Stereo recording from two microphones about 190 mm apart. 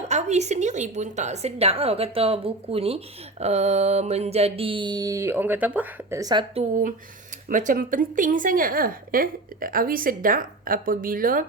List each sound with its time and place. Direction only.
0.1 s a woman's voice: 35° right (ahead or behind)
3.4 s a sound: 35° right (ahead or behind); by 6.4 s 20° right (ahead or behind)
6.5 s a woman's voice: 35° right (ahead or behind)